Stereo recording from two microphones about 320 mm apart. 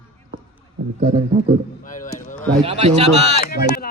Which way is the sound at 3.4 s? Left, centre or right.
Left.